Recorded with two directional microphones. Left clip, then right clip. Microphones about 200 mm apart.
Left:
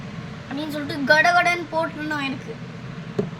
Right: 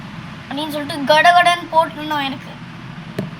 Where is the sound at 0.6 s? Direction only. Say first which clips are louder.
Right 5 dB; 10° left (ahead or behind).